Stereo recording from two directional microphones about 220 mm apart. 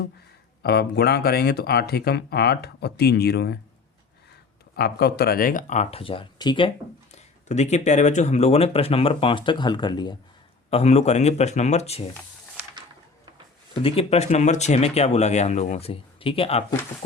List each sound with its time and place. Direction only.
0.6 s speech: 45° left (ahead or behind)
4.8 s speech: 45° left (ahead or behind); by 12.0 s 30° left (ahead or behind)
13.7 s speech: 25° left (ahead or behind)